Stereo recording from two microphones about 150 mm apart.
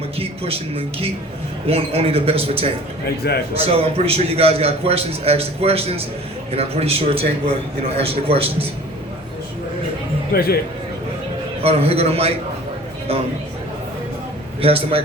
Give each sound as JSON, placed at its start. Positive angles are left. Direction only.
{"t": 0.2, "sound": "a man's voice", "side_deg": -40}
{"t": 10.3, "sound": "a man's voice", "side_deg": 90}
{"t": 11.6, "sound": "a man's voice", "side_deg": -40}
{"t": 14.6, "sound": "a man's voice", "side_deg": -40}